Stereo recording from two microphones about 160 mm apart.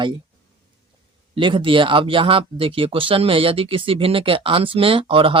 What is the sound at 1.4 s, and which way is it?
A man's voice, 30° right (ahead or behind).